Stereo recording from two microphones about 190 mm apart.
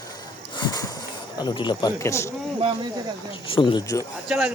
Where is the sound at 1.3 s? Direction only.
25° left (ahead or behind).